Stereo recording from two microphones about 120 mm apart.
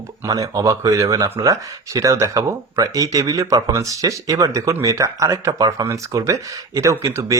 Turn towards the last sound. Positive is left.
turn(degrees=-25)  # may be behind; listen again after turning